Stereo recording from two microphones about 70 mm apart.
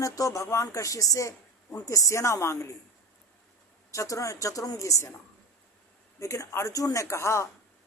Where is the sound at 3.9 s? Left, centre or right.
Left.